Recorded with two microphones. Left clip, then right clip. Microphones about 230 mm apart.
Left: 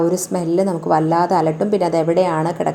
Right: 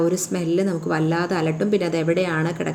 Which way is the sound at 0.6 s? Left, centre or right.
Centre.